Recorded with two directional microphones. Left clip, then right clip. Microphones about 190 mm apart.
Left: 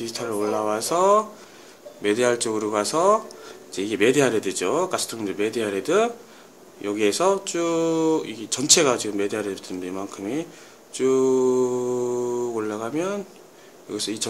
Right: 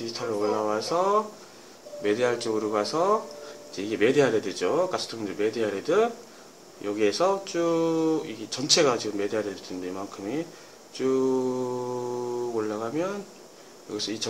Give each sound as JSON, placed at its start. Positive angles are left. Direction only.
{"t": 0.0, "sound": "speech", "side_deg": 40}